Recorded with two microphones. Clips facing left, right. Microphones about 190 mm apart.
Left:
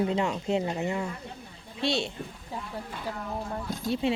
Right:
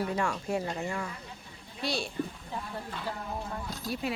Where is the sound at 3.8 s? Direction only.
25° left (ahead or behind).